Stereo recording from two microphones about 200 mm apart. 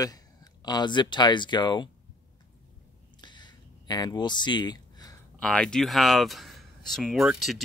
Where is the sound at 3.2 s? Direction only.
20° left (ahead or behind).